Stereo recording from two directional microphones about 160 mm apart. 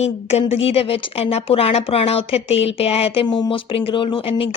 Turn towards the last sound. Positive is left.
turn(degrees=35)  # may be behind; listen again after turning